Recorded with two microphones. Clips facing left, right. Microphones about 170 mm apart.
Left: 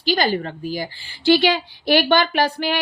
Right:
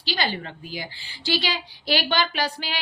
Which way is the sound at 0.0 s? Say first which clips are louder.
Left 8 dB; 50° left (ahead or behind).